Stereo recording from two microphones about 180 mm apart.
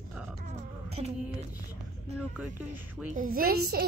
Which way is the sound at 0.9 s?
35° right (ahead or behind).